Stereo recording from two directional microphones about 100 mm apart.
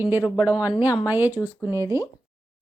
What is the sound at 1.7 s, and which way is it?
Speech, 30° right (ahead or behind).